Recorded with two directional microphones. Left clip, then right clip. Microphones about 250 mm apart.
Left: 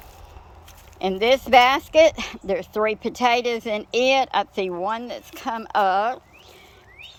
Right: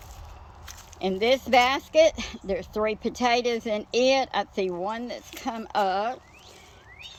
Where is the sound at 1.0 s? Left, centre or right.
Centre.